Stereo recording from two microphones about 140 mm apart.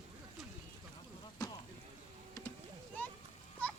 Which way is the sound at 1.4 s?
25° left (ahead or behind).